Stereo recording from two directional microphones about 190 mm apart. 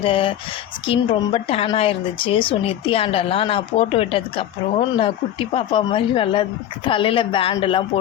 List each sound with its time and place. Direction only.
0.0 s a woman's voice: 25° left (ahead or behind)